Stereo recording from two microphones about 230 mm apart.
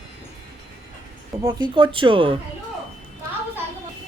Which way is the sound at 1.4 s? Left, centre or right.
Centre.